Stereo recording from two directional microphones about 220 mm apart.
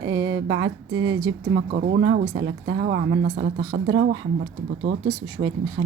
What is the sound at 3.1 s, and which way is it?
Speech, 40° right (ahead or behind).